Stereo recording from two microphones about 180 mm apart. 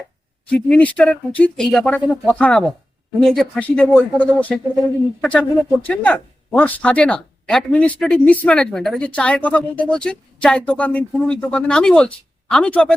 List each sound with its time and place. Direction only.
0.5 s speech: 5° left (ahead or behind)